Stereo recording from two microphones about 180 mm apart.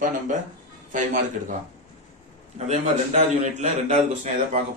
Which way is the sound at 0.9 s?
45° right (ahead or behind).